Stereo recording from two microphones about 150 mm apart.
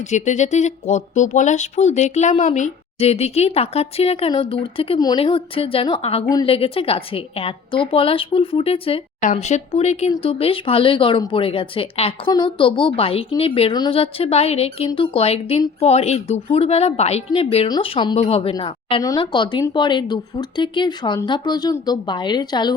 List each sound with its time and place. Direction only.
0.1 s a woman's voice: 50° left (ahead or behind)
9.2 s a woman's voice: 50° left (ahead or behind); by 22.7 s 30° left (ahead or behind)